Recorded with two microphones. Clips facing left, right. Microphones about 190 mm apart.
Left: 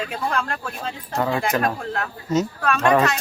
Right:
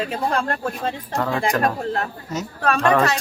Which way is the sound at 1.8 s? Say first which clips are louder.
Right 3 dB; 35° right (ahead or behind).